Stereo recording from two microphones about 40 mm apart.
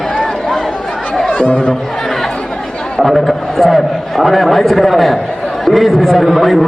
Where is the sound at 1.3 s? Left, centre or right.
Left.